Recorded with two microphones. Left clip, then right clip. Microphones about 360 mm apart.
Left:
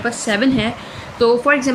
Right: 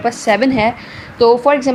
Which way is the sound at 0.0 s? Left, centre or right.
Centre.